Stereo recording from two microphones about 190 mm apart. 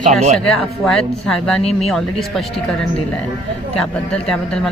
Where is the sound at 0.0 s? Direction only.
40° right (ahead or behind).